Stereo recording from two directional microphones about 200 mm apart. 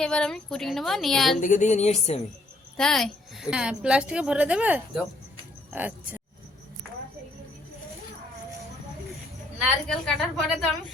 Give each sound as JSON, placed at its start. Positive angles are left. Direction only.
{"t": 0.0, "sound": "a woman's voice", "side_deg": 5}
{"t": 1.4, "sound": "a sound", "side_deg": 40}
{"t": 2.7, "sound": "a woman's voice", "side_deg": 0}
{"t": 9.6, "sound": "a woman's voice", "side_deg": 0}